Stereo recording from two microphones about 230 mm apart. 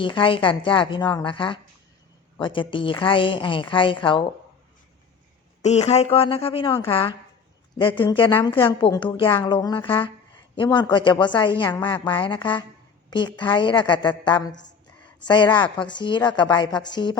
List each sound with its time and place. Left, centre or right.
0.0 s a woman's voice: left
5.6 s a woman's voice: left